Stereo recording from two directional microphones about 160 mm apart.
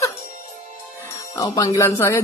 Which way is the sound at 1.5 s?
20° left (ahead or behind).